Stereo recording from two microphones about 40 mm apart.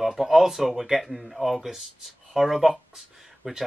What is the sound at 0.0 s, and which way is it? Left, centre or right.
Speech, centre.